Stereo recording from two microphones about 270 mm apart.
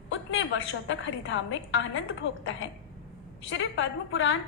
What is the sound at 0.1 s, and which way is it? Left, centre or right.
A woman's voice, left.